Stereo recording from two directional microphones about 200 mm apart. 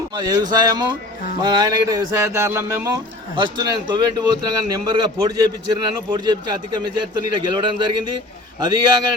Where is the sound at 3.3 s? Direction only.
25° right (ahead or behind).